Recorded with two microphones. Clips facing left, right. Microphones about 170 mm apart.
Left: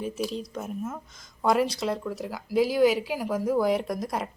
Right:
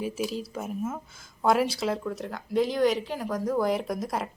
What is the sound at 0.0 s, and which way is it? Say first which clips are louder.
A woman's voice: even; 5° right (ahead or behind).